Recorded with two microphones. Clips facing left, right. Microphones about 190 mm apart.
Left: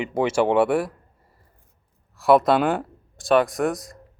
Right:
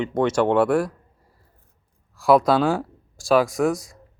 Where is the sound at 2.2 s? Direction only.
Centre (ahead or behind).